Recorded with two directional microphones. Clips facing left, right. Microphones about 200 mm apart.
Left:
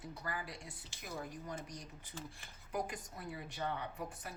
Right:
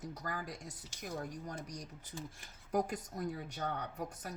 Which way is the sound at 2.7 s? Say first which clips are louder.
Right 6 dB; 40° right (ahead or behind).